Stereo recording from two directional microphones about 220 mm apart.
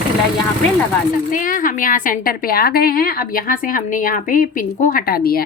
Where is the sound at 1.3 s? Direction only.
40° left (ahead or behind).